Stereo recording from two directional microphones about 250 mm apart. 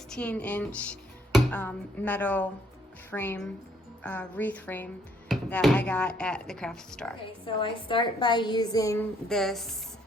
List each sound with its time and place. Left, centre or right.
0.1 s a woman's voice: centre
7.4 s a woman's voice: centre
9.3 s speech: centre